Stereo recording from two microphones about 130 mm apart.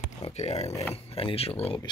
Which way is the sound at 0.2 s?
55° left (ahead or behind).